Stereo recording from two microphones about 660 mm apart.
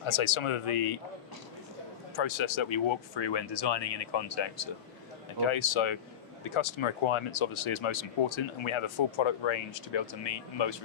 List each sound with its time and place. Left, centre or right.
0.0 s speech: left
2.1 s speech: left